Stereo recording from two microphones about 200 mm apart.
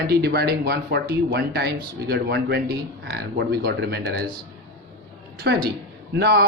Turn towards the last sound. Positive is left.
turn(degrees=-55)  # may be behind; listen again after turning